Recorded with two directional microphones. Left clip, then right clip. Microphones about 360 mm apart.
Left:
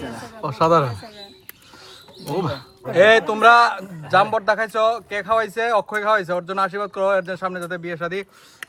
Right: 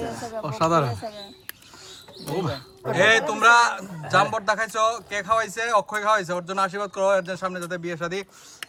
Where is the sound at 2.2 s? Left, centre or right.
Centre.